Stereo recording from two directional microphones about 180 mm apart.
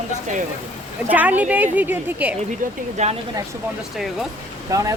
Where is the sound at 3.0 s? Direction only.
40° right (ahead or behind).